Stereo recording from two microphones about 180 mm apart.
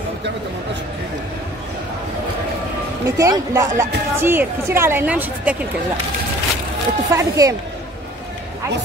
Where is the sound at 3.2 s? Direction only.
15° right (ahead or behind).